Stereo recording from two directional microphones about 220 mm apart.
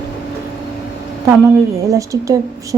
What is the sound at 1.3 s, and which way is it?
A woman's voice, 15° right (ahead or behind).